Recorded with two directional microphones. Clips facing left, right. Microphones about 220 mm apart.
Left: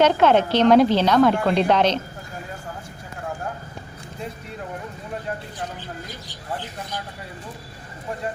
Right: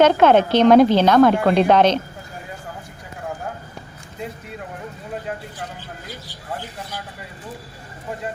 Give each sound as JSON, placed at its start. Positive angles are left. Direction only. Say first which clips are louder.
{"t": 0.0, "sound": "a woman's voice", "louder": "right 3 dB", "side_deg": -50}